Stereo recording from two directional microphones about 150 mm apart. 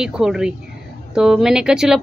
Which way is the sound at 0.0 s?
5° right (ahead or behind).